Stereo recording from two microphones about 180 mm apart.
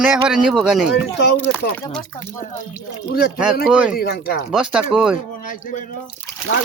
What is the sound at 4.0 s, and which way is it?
Speech, 60° left (ahead or behind).